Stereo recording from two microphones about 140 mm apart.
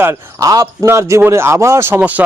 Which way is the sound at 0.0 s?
15° right (ahead or behind).